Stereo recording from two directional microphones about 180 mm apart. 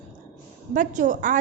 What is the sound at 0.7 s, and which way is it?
Speech, 45° right (ahead or behind).